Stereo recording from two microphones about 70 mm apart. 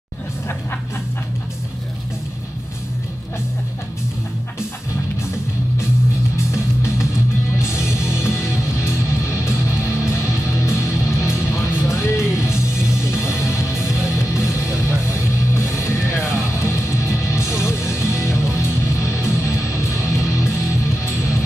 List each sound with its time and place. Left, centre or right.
6.3 s music: left